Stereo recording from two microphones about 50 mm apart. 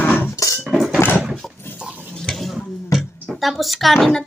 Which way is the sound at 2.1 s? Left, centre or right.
Centre.